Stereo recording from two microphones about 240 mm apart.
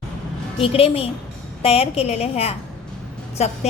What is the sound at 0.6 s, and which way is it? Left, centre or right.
A woman's voice, left.